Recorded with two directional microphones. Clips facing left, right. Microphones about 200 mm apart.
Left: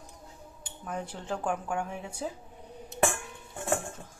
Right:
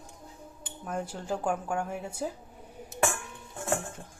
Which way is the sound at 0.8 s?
10° right (ahead or behind).